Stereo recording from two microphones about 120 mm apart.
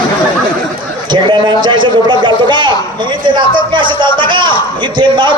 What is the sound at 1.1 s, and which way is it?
A man's voice, 40° right (ahead or behind).